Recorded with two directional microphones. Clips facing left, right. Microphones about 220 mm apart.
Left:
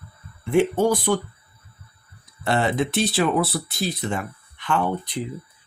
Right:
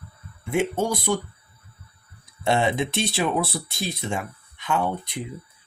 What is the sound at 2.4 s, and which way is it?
Speech, 25° right (ahead or behind).